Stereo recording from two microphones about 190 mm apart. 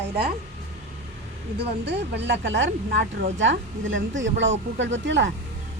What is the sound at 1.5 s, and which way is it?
Speech, 60° right (ahead or behind).